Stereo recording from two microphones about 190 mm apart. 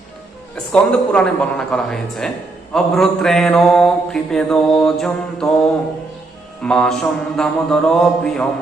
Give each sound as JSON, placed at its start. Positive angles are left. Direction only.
{"t": 0.5, "sound": "mantra", "side_deg": 5}
{"t": 6.6, "sound": "mantra", "side_deg": 5}